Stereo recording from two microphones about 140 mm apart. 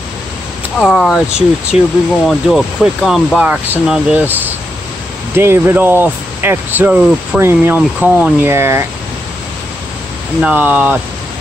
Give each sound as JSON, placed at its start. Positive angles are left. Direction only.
{"t": 0.7, "sound": "speech", "side_deg": 0}
{"t": 10.4, "sound": "speech", "side_deg": -10}